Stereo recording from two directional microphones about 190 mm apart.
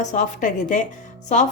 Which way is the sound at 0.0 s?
40° left (ahead or behind).